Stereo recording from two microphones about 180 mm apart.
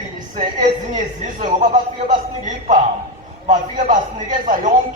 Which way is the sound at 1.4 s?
45° right (ahead or behind).